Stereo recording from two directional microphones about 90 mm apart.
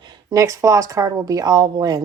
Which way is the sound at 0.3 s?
35° right (ahead or behind).